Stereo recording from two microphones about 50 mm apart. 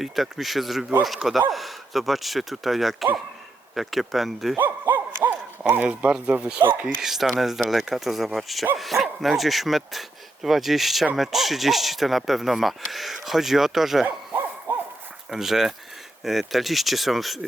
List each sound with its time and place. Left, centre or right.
0.0 s speech: centre
4.5 s a sound: right
5.9 s speech: right
6.8 s speech: centre
15.3 s speech: centre